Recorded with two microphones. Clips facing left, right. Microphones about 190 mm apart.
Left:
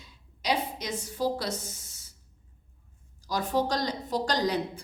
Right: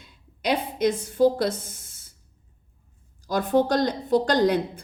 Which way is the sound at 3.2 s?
55° right (ahead or behind).